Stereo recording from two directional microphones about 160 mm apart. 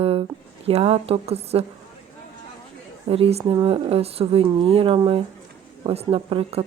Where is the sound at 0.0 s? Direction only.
40° right (ahead or behind).